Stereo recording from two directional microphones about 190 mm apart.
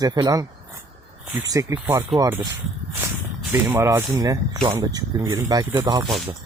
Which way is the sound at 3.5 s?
10° right (ahead or behind).